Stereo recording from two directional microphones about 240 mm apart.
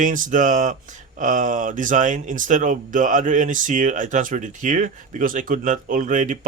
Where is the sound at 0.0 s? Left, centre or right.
Right.